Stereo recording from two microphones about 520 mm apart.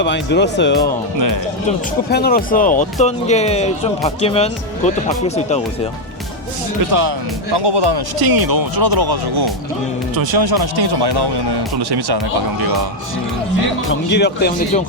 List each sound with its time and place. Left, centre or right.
0.0 s speech: centre
2.0 s speech: centre
7.5 s speech: right
13.8 s speech: centre